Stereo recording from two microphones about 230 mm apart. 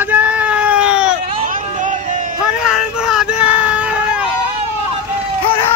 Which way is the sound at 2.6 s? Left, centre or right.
Centre.